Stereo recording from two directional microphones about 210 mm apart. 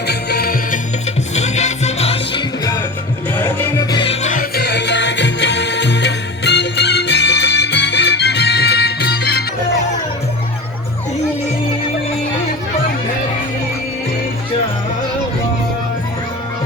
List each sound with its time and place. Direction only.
0.1 s music: 50° left (ahead or behind)
1.4 s music: 30° left (ahead or behind)
3.3 s music: 10° left (ahead or behind)
4.0 s music: 30° left (ahead or behind); by 9.4 s 50° left (ahead or behind)